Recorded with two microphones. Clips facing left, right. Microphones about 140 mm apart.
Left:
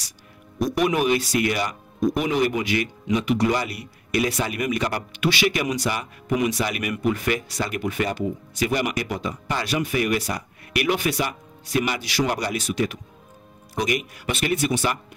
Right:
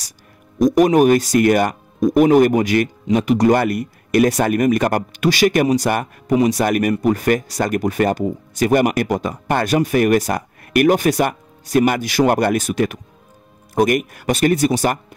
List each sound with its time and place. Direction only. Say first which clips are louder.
0.6 s speech: right 9 dB; 45° right (ahead or behind)